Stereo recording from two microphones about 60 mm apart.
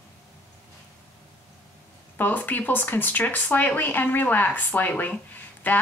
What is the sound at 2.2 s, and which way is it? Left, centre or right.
A woman's voice, left.